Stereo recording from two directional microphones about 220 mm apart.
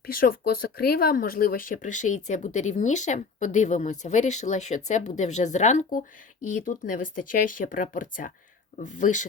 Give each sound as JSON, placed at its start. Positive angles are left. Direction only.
{"t": 0.0, "sound": "speech", "side_deg": 40}